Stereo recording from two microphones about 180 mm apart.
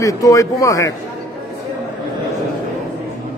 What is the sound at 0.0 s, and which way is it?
Speech, 15° left (ahead or behind).